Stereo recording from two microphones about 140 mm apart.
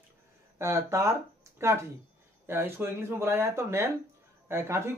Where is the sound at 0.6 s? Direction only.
20° right (ahead or behind).